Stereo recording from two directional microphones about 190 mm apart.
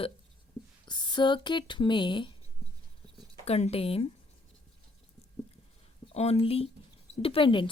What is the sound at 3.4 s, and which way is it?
Speech, 35° left (ahead or behind).